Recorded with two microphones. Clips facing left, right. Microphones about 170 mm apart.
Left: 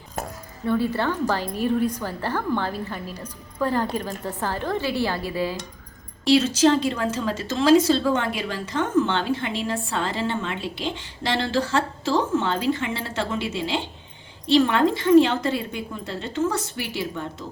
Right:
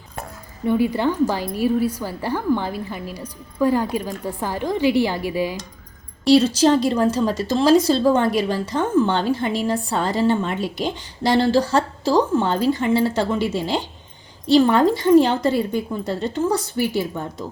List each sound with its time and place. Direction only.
0.6 s a woman's voice: 15° right (ahead or behind)
6.2 s a woman's voice: 35° right (ahead or behind)